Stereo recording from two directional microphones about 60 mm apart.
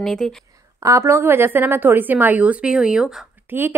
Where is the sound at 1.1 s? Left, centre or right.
Right; by 3.0 s centre.